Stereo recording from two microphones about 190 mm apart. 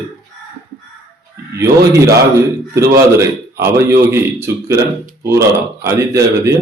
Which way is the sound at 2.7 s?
15° right (ahead or behind).